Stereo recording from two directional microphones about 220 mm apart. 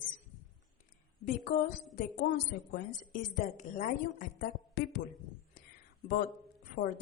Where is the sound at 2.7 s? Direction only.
40° left (ahead or behind).